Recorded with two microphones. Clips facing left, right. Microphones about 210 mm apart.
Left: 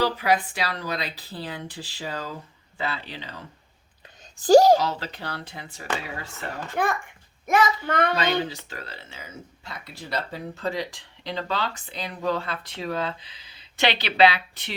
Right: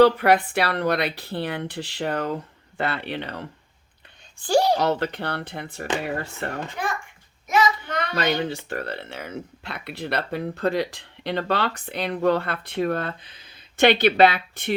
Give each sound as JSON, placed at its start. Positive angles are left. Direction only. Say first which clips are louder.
{"t": 0.0, "sound": "speech", "louder": "right 7 dB", "side_deg": -60}
{"t": 4.4, "sound": "a child's voice", "louder": "left 6 dB", "side_deg": 40}
{"t": 4.8, "sound": "speech", "louder": "right 6 dB", "side_deg": -60}
{"t": 7.4, "sound": "a child's voice", "louder": "even", "side_deg": 55}
{"t": 8.1, "sound": "speech", "louder": "right 1 dB", "side_deg": -60}